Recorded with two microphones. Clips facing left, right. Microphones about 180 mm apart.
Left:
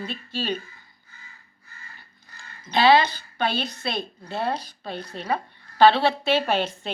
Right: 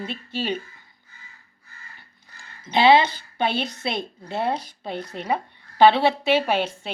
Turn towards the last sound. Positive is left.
turn(degrees=-10)  # may be behind; listen again after turning